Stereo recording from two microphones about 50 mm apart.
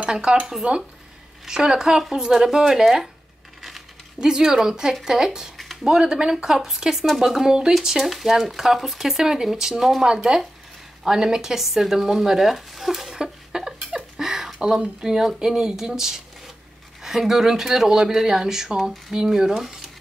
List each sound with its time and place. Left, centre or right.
0.0 s speech: centre
4.2 s speech: centre
13.2 s a sound: centre
15.0 s speech: centre